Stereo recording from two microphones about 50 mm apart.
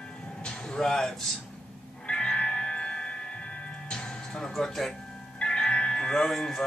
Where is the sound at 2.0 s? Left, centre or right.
Centre.